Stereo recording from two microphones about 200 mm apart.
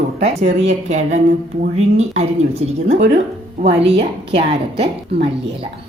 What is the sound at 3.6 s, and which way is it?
A woman's voice, 30° right (ahead or behind).